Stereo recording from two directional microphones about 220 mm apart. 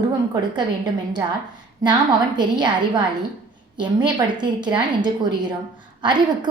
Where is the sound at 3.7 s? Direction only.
20° right (ahead or behind).